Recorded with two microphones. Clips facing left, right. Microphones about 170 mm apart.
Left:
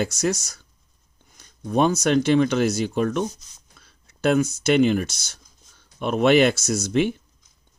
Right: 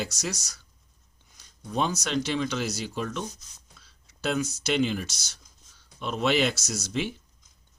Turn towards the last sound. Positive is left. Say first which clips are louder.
# left 9 dB
turn(degrees=55)  # may be behind; listen again after turning